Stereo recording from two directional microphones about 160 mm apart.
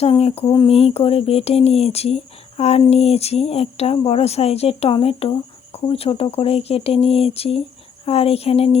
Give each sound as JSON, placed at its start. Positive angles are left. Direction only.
{"t": 0.0, "sound": "speech", "side_deg": 40}